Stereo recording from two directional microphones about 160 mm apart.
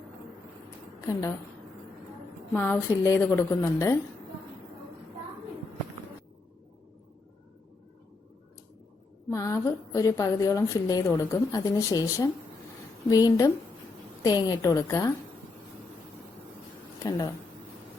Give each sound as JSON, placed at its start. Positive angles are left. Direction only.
{"t": 2.5, "sound": "speech", "side_deg": 10}
{"t": 9.3, "sound": "a woman's voice", "side_deg": 20}
{"t": 17.0, "sound": "speech", "side_deg": 20}